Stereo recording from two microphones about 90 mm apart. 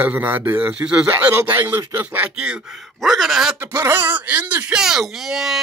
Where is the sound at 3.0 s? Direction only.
Centre (ahead or behind).